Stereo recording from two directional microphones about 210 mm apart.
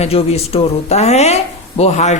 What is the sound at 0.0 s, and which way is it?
A woman's voice, 30° left (ahead or behind).